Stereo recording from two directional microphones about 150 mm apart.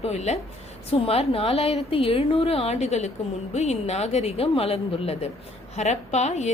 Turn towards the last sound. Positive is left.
turn(degrees=50)  # may be behind; listen again after turning